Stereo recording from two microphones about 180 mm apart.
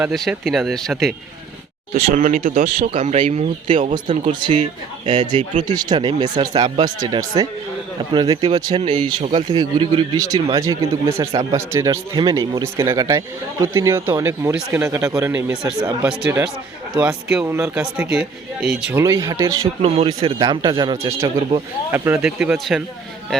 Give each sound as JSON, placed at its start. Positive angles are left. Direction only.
{"t": 0.0, "sound": "speech", "side_deg": 0}
{"t": 1.9, "sound": "speech", "side_deg": -45}
{"t": 2.9, "sound": "speech", "side_deg": -35}
{"t": 3.9, "sound": "speech", "side_deg": -25}
{"t": 8.4, "sound": "speech", "side_deg": -30}
{"t": 19.0, "sound": "speech", "side_deg": -20}
{"t": 19.8, "sound": "speech", "side_deg": -30}
{"t": 21.9, "sound": "speech", "side_deg": -15}